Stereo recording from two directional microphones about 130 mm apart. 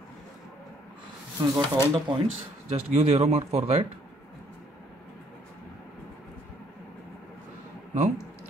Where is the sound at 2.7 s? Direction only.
50° right (ahead or behind).